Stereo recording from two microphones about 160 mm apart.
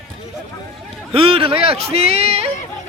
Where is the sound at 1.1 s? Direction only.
35° right (ahead or behind).